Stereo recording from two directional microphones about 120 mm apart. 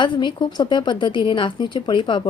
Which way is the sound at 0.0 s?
40° left (ahead or behind).